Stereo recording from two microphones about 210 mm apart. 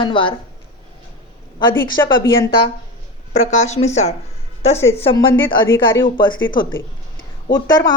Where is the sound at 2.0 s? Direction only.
15° left (ahead or behind).